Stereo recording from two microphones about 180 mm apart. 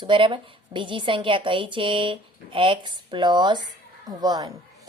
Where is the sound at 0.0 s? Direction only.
30° right (ahead or behind).